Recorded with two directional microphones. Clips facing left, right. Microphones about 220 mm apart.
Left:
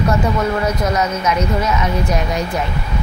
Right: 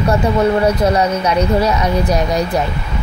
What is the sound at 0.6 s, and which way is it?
Speech, 30° right (ahead or behind).